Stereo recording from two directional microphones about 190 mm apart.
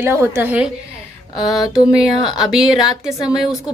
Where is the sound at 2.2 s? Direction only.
20° left (ahead or behind).